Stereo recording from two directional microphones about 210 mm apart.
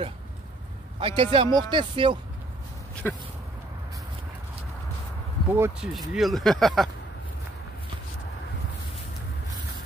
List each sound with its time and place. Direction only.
0.9 s a man's voice: 25° right (ahead or behind)
3.0 s speech: 10° left (ahead or behind)
5.5 s speech: 10° right (ahead or behind)
5.9 s speech: centre (ahead or behind)